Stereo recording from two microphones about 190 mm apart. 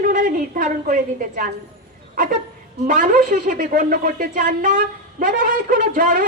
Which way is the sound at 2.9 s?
45° right (ahead or behind).